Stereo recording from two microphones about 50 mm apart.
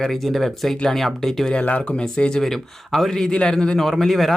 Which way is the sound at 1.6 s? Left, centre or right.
Left.